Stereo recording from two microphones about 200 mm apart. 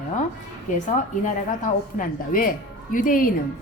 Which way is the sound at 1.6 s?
40° left (ahead or behind).